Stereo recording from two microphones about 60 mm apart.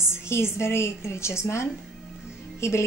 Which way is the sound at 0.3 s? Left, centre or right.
Left.